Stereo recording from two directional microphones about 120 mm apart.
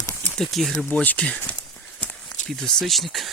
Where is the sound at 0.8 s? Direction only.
15° left (ahead or behind).